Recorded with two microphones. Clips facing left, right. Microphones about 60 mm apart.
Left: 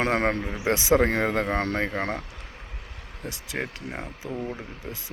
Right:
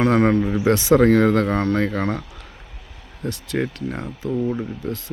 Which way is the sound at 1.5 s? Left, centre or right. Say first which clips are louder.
Right 6 dB; left.